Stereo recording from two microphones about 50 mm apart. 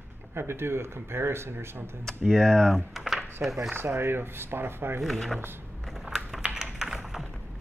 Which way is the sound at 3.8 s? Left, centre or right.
Right.